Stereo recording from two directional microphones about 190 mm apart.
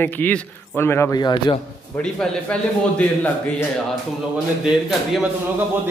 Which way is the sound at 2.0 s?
5° left (ahead or behind).